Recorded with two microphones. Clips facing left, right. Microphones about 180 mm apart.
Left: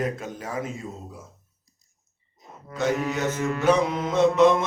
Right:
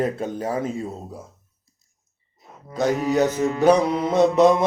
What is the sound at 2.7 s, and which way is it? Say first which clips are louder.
A man's voice: right 5 dB; 40° right (ahead or behind).